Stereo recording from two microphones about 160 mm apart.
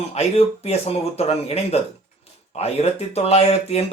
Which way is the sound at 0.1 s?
40° left (ahead or behind).